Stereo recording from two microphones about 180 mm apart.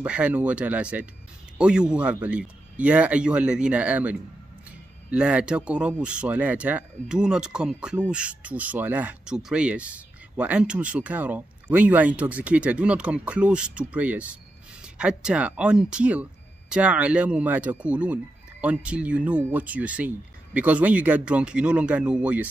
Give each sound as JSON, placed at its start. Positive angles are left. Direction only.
{"t": 0.0, "sound": "speech", "side_deg": -5}